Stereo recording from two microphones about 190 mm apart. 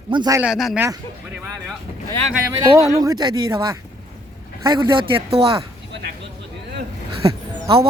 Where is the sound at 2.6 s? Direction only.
20° right (ahead or behind).